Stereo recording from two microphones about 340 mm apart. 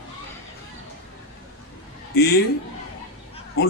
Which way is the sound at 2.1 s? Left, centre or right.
Left.